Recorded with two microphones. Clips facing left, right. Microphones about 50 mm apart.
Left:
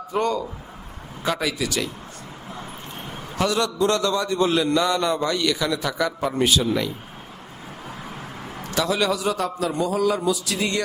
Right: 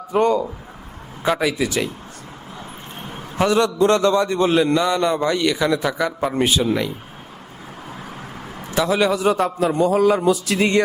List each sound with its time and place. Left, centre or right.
0.1 s a man's voice: right
3.3 s a man's voice: right
6.3 s a man's voice: right
8.7 s a man's voice: right